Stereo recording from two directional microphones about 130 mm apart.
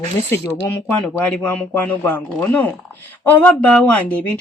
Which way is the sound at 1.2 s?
10° left (ahead or behind).